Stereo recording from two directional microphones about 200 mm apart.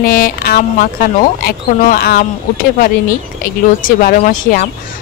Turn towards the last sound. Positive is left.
turn(degrees=45)  # may be behind; listen again after turning